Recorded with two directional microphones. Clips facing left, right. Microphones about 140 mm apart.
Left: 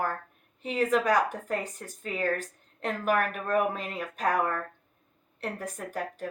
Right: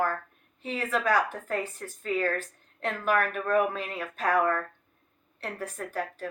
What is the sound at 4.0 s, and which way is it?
Speech, 15° left (ahead or behind).